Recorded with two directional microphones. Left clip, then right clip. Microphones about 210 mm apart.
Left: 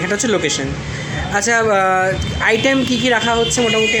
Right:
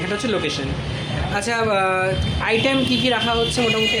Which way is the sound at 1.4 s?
15° left (ahead or behind).